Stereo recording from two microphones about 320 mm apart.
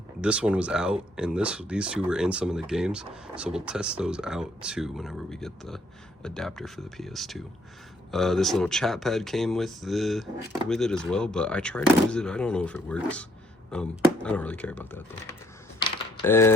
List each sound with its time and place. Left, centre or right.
0.2 s speech: centre
16.2 s speech: centre